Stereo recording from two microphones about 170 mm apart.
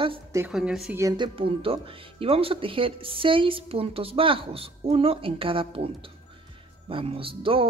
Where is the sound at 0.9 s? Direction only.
20° right (ahead or behind).